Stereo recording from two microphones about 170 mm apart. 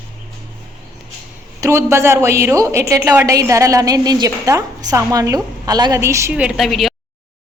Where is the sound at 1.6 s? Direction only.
15° right (ahead or behind); by 6.9 s centre (ahead or behind).